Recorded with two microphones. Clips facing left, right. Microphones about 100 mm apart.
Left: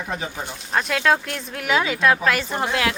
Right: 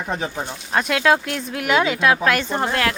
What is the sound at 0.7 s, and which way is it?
Speech, centre (ahead or behind).